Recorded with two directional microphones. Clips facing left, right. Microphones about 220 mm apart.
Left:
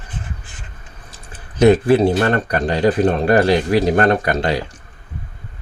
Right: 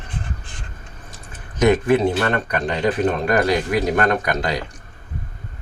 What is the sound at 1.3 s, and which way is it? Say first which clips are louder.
Speech: left 5 dB; 30° left (ahead or behind).